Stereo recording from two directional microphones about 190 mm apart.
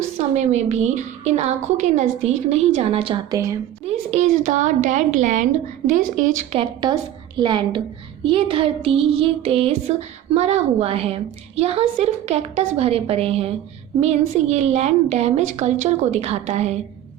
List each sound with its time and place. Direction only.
0.2 s a woman's voice: 35° right (ahead or behind)
3.3 s a woman's voice: 15° right (ahead or behind)
3.8 s a woman's voice: 35° right (ahead or behind)
6.5 s a sound: 30° right (ahead or behind)
10.3 s a woman's voice: 35° right (ahead or behind)